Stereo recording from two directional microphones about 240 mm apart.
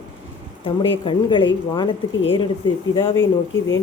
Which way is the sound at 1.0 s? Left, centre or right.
Centre.